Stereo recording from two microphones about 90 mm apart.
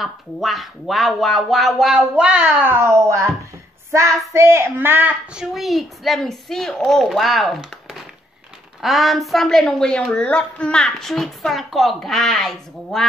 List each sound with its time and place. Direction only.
0.0 s a woman's voice: centre (ahead or behind)
2.7 s speech: 30° right (ahead or behind)
4.3 s speech: 30° right (ahead or behind)
5.3 s a woman's voice: 5° right (ahead or behind)
8.8 s a woman's voice: centre (ahead or behind)